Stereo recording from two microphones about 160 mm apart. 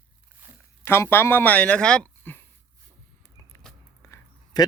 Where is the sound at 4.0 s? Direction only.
15° left (ahead or behind).